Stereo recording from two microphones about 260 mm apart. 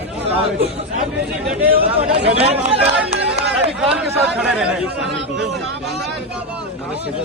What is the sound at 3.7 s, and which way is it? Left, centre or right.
Speech, centre.